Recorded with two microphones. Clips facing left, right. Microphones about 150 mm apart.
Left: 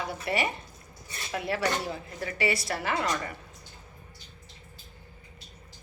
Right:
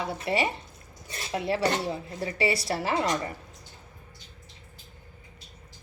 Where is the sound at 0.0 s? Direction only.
25° right (ahead or behind).